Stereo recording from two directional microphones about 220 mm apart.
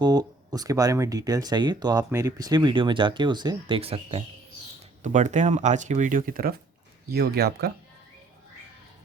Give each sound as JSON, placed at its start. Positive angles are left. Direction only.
{"t": 0.0, "sound": "speech", "side_deg": -15}